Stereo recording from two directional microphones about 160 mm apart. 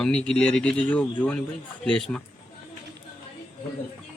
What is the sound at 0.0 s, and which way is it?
Speech, 5° left (ahead or behind).